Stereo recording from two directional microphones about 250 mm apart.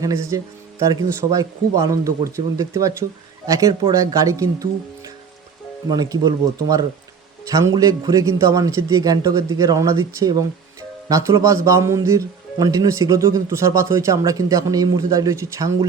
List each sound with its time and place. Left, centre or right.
0.0 s speech: centre